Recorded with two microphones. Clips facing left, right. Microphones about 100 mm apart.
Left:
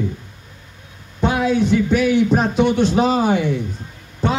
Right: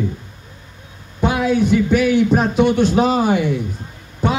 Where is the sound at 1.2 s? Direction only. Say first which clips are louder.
Right 1 dB; 5° right (ahead or behind).